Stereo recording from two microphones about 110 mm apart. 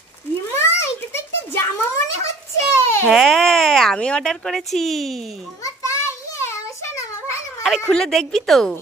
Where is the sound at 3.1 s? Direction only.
Centre (ahead or behind).